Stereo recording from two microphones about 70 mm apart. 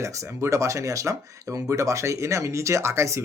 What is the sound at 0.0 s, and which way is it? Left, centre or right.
Speech, right.